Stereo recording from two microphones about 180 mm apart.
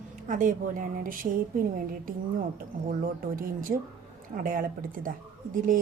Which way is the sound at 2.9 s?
50° right (ahead or behind).